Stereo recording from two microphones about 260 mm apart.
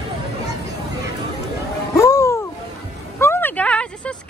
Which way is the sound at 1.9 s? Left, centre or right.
Centre.